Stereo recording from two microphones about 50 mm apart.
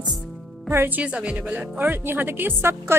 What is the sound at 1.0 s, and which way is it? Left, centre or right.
Speech, right.